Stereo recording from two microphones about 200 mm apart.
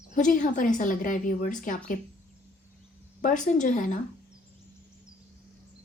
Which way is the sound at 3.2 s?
40° left (ahead or behind).